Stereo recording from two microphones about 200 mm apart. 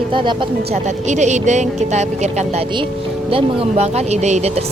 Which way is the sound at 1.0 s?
35° right (ahead or behind).